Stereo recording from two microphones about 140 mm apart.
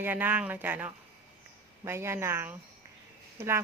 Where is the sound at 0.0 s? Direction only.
15° right (ahead or behind).